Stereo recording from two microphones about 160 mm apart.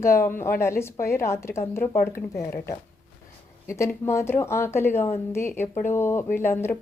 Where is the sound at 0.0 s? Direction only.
15° left (ahead or behind).